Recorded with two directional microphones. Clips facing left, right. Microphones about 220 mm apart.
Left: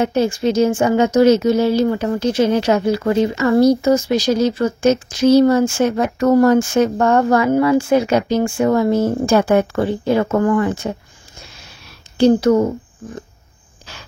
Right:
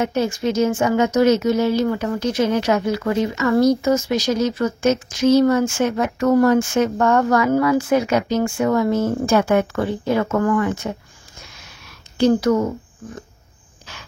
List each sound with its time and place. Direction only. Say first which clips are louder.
0.0 s speech: left 4 dB; 30° left (ahead or behind)
12.2 s a woman's voice: left 4 dB; 30° left (ahead or behind)